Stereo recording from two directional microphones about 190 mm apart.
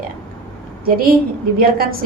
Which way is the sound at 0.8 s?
50° right (ahead or behind).